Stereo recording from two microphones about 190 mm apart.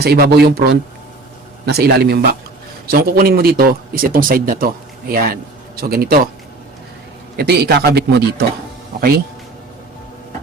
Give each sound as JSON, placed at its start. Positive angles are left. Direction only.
{"t": 0.0, "sound": "a man's voice", "side_deg": -55}
{"t": 7.3, "sound": "a man's voice", "side_deg": -55}